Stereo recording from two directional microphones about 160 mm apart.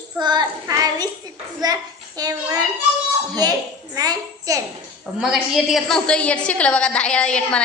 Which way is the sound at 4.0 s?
25° right (ahead or behind).